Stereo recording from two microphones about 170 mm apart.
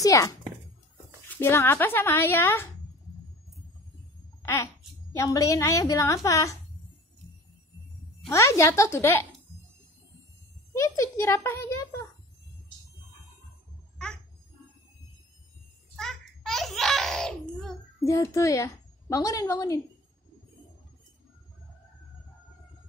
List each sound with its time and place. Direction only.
0.0 s a woman's voice: 20° left (ahead or behind)
4.4 s babbling: 15° left (ahead or behind)
5.1 s a woman's voice: 20° left (ahead or behind)
8.3 s a woman's voice: 15° left (ahead or behind)
10.7 s a woman's voice: 15° left (ahead or behind)
13.9 s a sound: 5° left (ahead or behind)
16.0 s a sound: centre (ahead or behind)
18.0 s a woman's voice: 20° left (ahead or behind)